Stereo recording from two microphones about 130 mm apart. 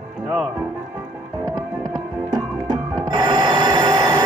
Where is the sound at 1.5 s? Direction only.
30° right (ahead or behind).